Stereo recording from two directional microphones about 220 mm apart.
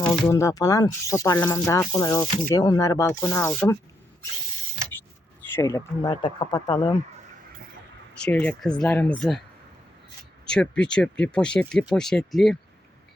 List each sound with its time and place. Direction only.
0.0 s speech: 15° left (ahead or behind)
5.5 s speech: 15° left (ahead or behind)
8.1 s speech: 5° left (ahead or behind)
10.4 s speech: 5° left (ahead or behind)